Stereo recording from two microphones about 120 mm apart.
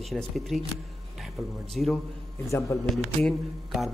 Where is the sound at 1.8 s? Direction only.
5° left (ahead or behind).